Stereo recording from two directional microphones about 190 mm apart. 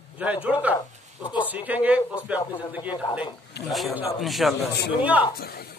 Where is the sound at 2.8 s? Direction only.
25° left (ahead or behind).